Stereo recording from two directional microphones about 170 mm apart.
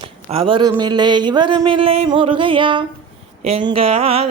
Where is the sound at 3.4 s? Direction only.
35° right (ahead or behind).